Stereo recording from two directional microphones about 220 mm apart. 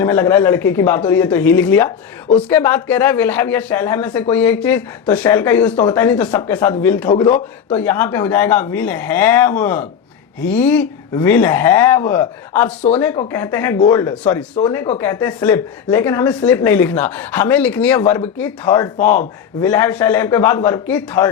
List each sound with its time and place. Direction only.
0.0 s a woman's voice: 10° left (ahead or behind)
18.9 s a man's voice: 35° left (ahead or behind)
19.6 s a woman's voice: 10° left (ahead or behind)